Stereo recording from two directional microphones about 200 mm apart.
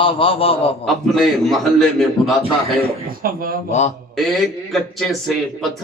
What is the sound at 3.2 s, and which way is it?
Speech, 45° right (ahead or behind).